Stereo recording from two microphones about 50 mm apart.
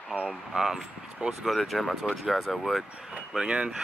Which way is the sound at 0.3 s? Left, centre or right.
Centre.